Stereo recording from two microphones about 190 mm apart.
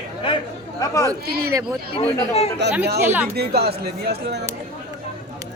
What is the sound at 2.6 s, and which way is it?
Speech, 65° right (ahead or behind).